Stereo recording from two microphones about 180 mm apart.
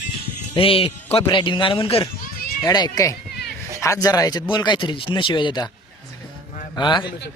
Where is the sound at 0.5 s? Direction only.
30° left (ahead or behind).